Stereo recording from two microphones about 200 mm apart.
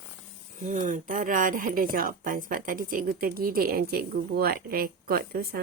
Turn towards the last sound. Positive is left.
turn(degrees=-50)  # may be behind; listen again after turning